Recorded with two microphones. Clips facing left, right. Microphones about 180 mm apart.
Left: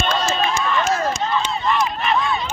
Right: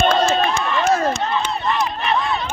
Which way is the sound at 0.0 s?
55° right (ahead or behind).